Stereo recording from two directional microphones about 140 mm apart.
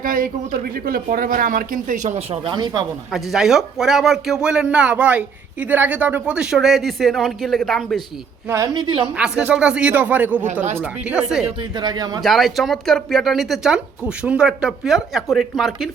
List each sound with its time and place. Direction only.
0.0 s speech: 90° right; by 2.8 s 30° right (ahead or behind)
3.1 s speech: centre (ahead or behind)
8.4 s speech: 20° right (ahead or behind)
9.1 s speech: 5° right (ahead or behind)
11.8 s speech: 30° right (ahead or behind)
12.2 s speech: centre (ahead or behind)